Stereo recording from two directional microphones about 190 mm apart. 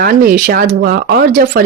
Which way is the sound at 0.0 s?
45° right (ahead or behind).